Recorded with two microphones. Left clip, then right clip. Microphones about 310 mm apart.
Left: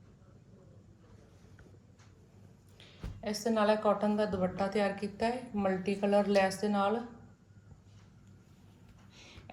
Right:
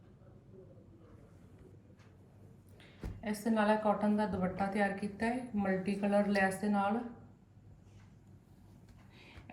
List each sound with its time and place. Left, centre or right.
3.2 s a woman's voice: centre